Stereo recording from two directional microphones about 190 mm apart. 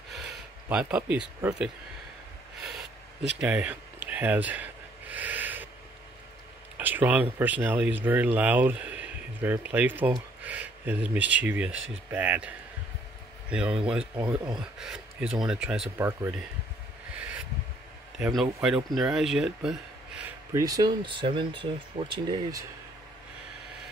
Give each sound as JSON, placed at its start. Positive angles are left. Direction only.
{"t": 0.1, "sound": "speech", "side_deg": -5}
{"t": 2.6, "sound": "a sound", "side_deg": 0}
{"t": 3.3, "sound": "speech", "side_deg": -10}
{"t": 5.1, "sound": "owl", "side_deg": -10}
{"t": 6.8, "sound": "speech", "side_deg": -10}
{"t": 18.2, "sound": "speech", "side_deg": 0}